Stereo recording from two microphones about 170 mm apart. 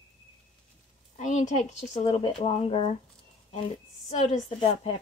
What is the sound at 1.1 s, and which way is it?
A woman's voice, 45° left (ahead or behind).